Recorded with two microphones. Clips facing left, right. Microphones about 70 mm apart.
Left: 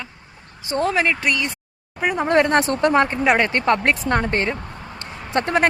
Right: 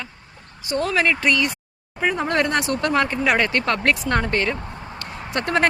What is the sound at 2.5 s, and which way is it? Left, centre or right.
Speech, left.